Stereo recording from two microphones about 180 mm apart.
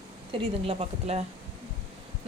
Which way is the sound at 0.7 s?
35° right (ahead or behind).